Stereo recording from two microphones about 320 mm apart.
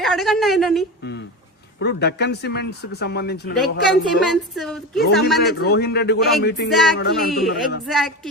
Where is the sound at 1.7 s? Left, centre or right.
Left.